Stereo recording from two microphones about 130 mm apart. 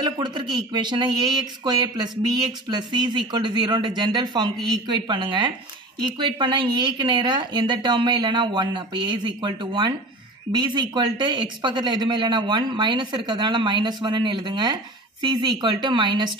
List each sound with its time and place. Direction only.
0.0 s speech: 35° right (ahead or behind)